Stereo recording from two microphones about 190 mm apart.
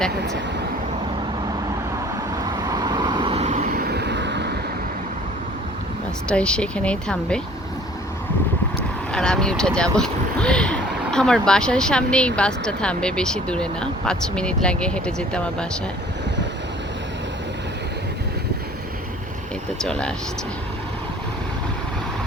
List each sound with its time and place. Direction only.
2.3 s vehicle: 20° right (ahead or behind); by 4.5 s 65° right (ahead or behind)
6.2 s speech: 5° left (ahead or behind)
9.1 s speech: 5° left (ahead or behind)
19.8 s speech: 5° left (ahead or behind)